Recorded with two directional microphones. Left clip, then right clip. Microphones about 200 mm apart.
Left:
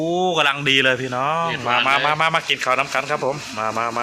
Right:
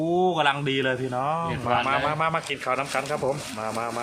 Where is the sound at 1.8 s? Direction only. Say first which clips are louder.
Left 6 dB; 10° left (ahead or behind).